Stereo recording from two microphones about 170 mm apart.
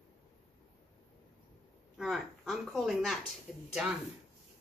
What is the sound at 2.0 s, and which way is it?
Speech, centre (ahead or behind).